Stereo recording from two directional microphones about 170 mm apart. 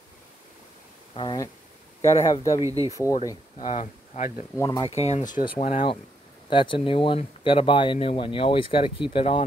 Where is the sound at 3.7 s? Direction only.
40° left (ahead or behind).